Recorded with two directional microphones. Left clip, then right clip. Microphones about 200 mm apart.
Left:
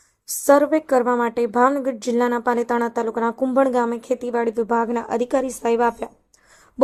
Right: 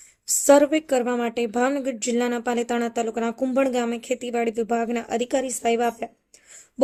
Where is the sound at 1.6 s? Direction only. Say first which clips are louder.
Left 7 dB; 15° right (ahead or behind).